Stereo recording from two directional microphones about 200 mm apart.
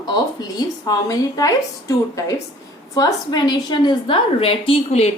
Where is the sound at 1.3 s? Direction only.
15° left (ahead or behind).